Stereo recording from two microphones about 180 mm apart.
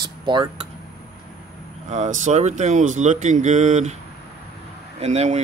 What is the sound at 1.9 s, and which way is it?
Speech, 40° right (ahead or behind).